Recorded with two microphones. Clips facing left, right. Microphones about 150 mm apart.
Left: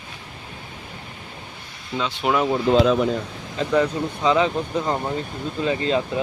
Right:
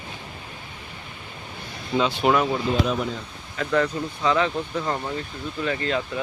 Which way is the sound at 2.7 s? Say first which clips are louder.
Left 10 dB; 65° left (ahead or behind).